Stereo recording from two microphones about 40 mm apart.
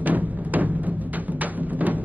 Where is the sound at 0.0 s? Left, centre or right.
Right.